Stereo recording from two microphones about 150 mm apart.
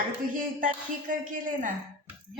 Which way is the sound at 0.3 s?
65° right (ahead or behind).